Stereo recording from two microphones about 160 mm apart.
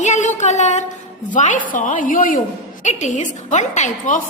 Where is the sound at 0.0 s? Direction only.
50° left (ahead or behind).